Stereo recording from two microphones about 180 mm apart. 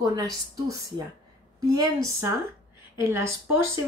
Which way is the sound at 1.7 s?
20° right (ahead or behind).